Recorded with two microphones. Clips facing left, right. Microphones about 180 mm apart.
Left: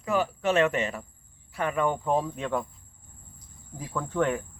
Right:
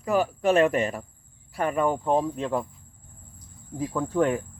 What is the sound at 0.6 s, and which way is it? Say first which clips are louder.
Speech: right 3 dB; 40° right (ahead or behind).